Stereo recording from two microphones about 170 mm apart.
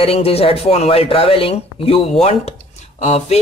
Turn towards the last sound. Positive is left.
turn(degrees=40)  # may be behind; listen again after turning